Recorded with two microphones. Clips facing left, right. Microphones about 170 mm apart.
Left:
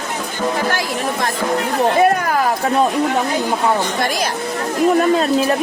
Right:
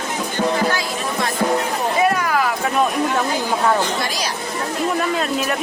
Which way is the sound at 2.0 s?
45° left (ahead or behind).